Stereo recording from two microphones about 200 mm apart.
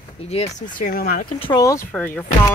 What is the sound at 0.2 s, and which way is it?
Speech, 30° left (ahead or behind).